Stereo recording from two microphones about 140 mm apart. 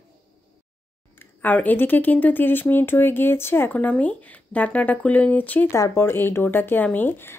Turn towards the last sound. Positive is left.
turn(degrees=15)  # may be behind; listen again after turning